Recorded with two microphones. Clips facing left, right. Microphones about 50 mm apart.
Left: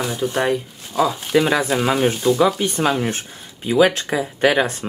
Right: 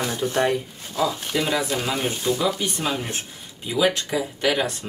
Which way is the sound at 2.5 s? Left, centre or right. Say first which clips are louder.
Left 6 dB; left.